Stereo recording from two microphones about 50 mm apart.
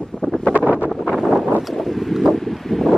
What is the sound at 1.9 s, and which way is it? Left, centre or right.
Wind, centre.